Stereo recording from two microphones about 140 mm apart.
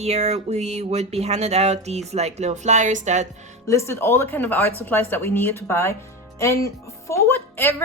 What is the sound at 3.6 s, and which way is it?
A woman's voice, 20° left (ahead or behind).